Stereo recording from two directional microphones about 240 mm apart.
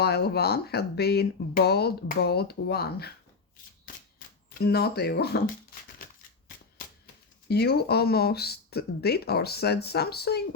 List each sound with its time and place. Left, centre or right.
0.0 s speech: left
3.9 s typewriter: left
4.5 s speech: left
5.7 s a sound: left
7.4 s speech: left